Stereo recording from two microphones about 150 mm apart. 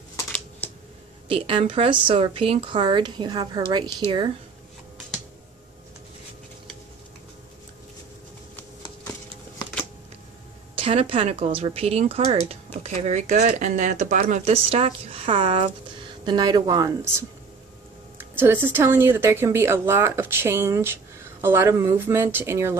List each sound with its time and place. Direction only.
1.3 s a woman's voice: 35° right (ahead or behind)
10.8 s a woman's voice: 40° right (ahead or behind); by 14.5 s 55° right (ahead or behind)
14.5 s a woman's voice: 40° right (ahead or behind)
16.3 s speech: 30° right (ahead or behind)
18.1 s speech: 15° right (ahead or behind)